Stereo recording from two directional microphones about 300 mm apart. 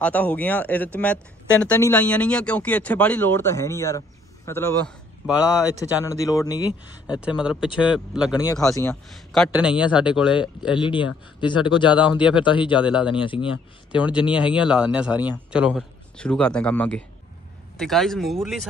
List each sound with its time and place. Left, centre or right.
0.0 s speech: centre
5.2 s speech: centre
6.0 s speech: centre
7.1 s speech: centre
10.8 s speech: centre
11.9 s speech: centre
12.4 s speech: centre
12.7 s speech: centre
13.1 s speech: centre
13.9 s speech: centre